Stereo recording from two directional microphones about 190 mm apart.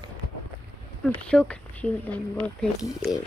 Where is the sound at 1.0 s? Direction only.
5° left (ahead or behind).